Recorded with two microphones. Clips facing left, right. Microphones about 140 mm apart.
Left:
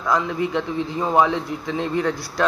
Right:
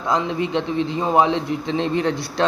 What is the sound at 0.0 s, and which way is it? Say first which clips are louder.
Speech: even; 25° right (ahead or behind).